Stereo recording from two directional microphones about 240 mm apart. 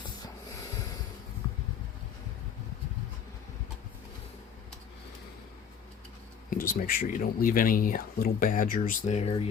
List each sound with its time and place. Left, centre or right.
6.5 s speech: left